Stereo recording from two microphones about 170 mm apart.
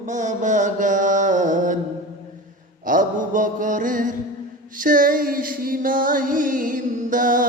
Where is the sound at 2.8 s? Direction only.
50° right (ahead or behind).